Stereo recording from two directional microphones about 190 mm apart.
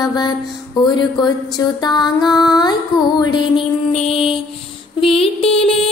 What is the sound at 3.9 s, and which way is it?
Music, 30° left (ahead or behind).